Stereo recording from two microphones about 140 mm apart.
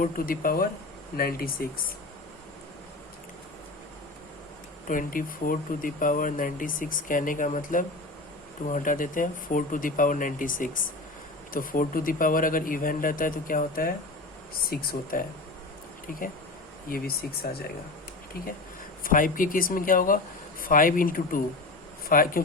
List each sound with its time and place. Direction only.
0.0 s speech: 90° left
4.9 s speech: 75° left (ahead or behind); by 15.2 s 90° left
16.9 s speech: 90° left
19.0 s speech: 75° left (ahead or behind)